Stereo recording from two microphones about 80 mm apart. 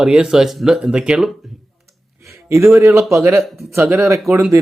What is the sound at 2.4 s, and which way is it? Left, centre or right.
Speech, right.